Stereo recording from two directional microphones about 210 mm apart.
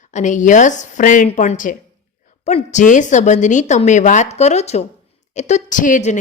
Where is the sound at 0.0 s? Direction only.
35° left (ahead or behind).